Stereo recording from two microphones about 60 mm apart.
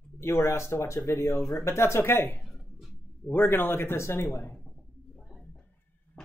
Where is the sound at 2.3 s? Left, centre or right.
Centre.